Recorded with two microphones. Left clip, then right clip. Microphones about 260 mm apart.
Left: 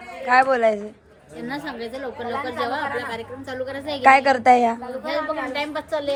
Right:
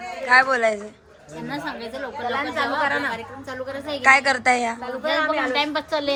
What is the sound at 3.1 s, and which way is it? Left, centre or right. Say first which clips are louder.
Speech: left 2 dB; centre.